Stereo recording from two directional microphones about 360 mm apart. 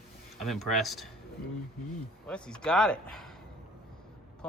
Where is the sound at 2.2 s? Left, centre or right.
Centre.